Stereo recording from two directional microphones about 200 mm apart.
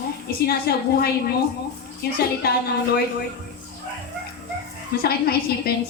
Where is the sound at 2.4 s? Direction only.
50° left (ahead or behind).